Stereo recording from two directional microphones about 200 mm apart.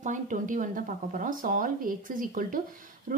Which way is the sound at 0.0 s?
40° right (ahead or behind).